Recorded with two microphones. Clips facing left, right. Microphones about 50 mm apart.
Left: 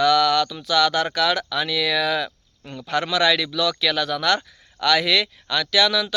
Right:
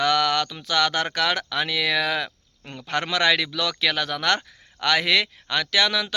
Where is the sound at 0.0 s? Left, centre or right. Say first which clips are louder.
Left 4 dB; right.